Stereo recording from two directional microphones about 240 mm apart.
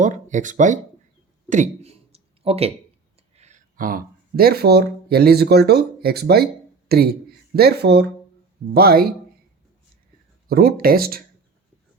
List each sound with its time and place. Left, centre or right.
0.0 s speech: right
1.5 s a sound: right
3.3 s speech: right
10.5 s speech: right